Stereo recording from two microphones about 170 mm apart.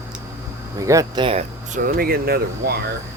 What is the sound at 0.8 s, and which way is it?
Speech, 20° right (ahead or behind).